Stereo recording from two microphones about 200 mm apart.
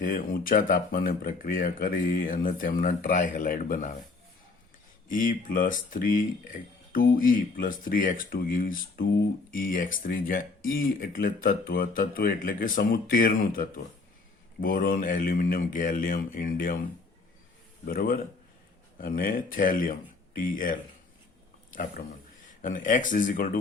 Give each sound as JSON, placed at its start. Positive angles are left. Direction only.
{"t": 0.0, "sound": "speech", "side_deg": 40}
{"t": 5.0, "sound": "speech", "side_deg": 40}
{"t": 17.8, "sound": "speech", "side_deg": 45}
{"t": 22.6, "sound": "speech", "side_deg": 40}